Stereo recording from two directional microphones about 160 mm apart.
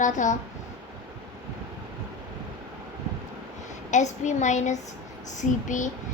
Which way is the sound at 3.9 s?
50° left (ahead or behind).